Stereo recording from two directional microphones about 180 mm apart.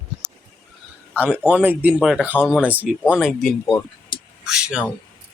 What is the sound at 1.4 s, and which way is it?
Speech, 10° right (ahead or behind).